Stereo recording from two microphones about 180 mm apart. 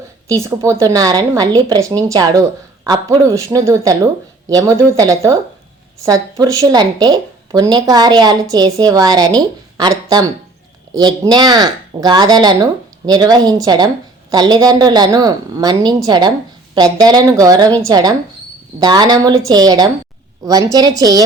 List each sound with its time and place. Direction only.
0.3 s a woman's voice: 15° right (ahead or behind)